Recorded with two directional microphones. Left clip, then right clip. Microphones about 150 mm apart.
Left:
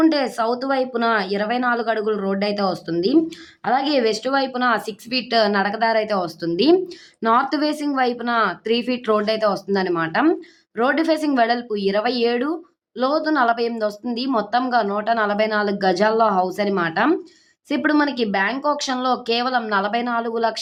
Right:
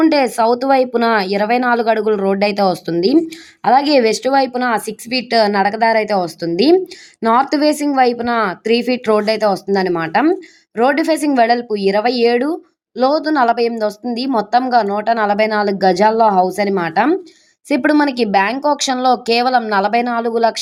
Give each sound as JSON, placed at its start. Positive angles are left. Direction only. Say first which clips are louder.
{"t": 0.0, "sound": "a woman's voice", "louder": "right 6 dB", "side_deg": -45}